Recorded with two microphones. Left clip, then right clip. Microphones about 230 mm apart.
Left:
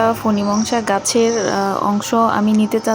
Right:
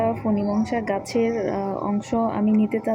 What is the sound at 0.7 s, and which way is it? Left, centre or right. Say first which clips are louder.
Speech: left 8 dB; left.